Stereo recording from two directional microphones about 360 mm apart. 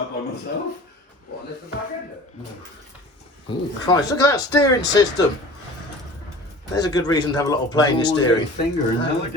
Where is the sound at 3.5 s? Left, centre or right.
Centre.